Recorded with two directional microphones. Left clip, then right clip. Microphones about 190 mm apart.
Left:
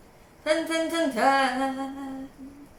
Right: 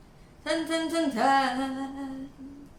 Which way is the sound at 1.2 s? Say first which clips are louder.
Left 2 dB; 15° right (ahead or behind).